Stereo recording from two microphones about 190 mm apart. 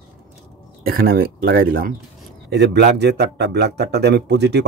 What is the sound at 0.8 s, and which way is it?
Speech, 50° right (ahead or behind).